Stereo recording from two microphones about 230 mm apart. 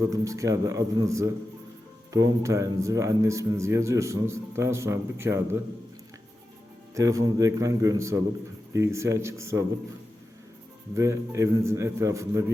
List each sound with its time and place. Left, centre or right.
0.0 s speech: centre
6.9 s speech: centre
10.9 s speech: centre